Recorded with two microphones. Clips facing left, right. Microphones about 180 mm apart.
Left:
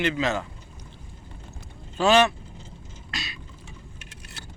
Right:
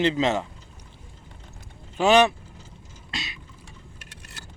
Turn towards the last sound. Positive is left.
turn(degrees=-20)  # may be behind; listen again after turning